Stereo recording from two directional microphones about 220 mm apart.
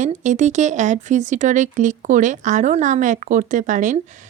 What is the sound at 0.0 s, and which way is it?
Speech, 35° right (ahead or behind).